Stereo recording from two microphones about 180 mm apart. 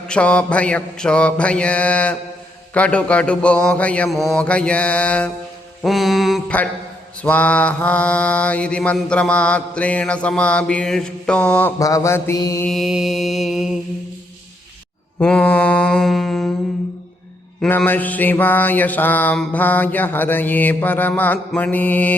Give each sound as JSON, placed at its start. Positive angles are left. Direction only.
{"t": 0.1, "sound": "mantra", "side_deg": 5}
{"t": 11.8, "sound": "mantra", "side_deg": 20}
{"t": 12.6, "sound": "mantra", "side_deg": 0}
{"t": 15.2, "sound": "mantra", "side_deg": 5}
{"t": 17.6, "sound": "mantra", "side_deg": 10}